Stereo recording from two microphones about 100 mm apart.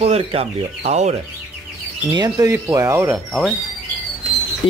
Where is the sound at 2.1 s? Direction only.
40° right (ahead or behind).